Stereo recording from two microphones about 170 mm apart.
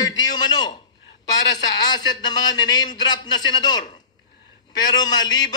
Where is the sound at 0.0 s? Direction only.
25° left (ahead or behind).